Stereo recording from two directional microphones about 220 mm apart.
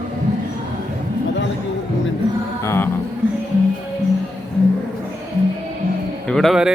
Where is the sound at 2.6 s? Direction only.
10° left (ahead or behind).